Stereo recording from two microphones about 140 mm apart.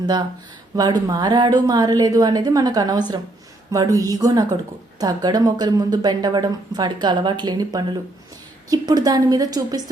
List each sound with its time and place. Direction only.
0.0 s speech: 30° right (ahead or behind)